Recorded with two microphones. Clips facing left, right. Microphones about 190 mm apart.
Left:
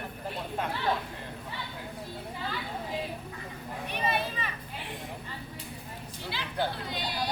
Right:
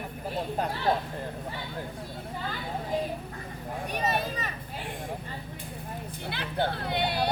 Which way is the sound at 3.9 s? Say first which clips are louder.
Right 1 dB; 45° right (ahead or behind).